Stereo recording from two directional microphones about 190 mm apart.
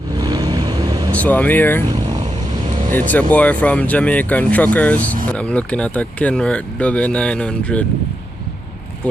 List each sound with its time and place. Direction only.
0.2 s vehicle: 20° right (ahead or behind)
1.1 s speech: 10° left (ahead or behind)
3.1 s speech: 10° left (ahead or behind)
4.9 s speech: 45° right (ahead or behind)
5.4 s speech: 5° left (ahead or behind)